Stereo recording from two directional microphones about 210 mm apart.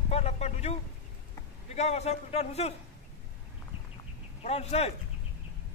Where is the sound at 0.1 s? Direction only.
30° left (ahead or behind).